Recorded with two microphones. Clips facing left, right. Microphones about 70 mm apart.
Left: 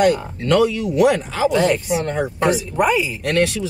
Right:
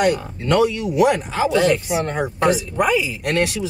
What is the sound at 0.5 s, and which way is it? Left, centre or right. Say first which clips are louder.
Speech: left 1 dB; centre.